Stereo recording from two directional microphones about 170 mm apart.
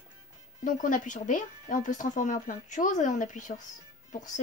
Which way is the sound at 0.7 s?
50° left (ahead or behind).